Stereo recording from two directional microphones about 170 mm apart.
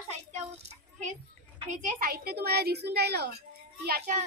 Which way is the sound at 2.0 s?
60° right (ahead or behind).